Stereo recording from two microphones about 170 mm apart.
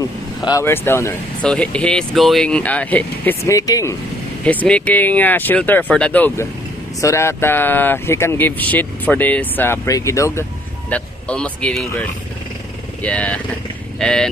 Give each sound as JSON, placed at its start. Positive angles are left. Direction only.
{"t": 0.4, "sound": "speech", "side_deg": 20}
{"t": 4.5, "sound": "speech", "side_deg": 10}